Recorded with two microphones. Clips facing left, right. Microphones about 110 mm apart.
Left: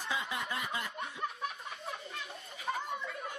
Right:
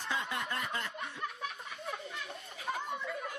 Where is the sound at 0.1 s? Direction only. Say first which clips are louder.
Right 1 dB; centre (ahead or behind).